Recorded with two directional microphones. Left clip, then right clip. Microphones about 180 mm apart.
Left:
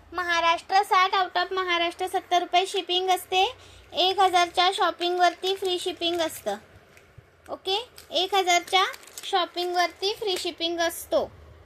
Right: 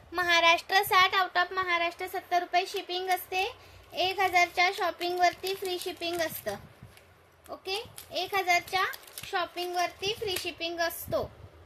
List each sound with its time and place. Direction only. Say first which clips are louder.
0.1 s a child's voice: even; 15° right (ahead or behind)
1.5 s speech: left 3 dB; 20° left (ahead or behind)